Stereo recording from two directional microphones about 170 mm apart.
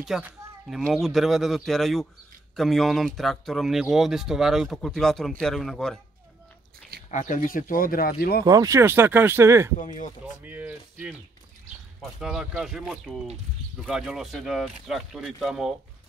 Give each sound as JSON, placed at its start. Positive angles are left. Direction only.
{"t": 0.0, "sound": "speech", "side_deg": -5}
{"t": 7.1, "sound": "speech", "side_deg": 50}
{"t": 8.5, "sound": "speech", "side_deg": -20}
{"t": 9.8, "sound": "speech", "side_deg": 50}
{"t": 10.4, "sound": "speech", "side_deg": -10}